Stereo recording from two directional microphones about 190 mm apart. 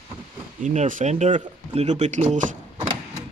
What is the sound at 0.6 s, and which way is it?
Speech, 40° right (ahead or behind).